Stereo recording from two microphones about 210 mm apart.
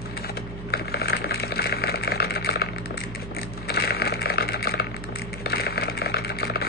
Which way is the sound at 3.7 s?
50° left (ahead or behind).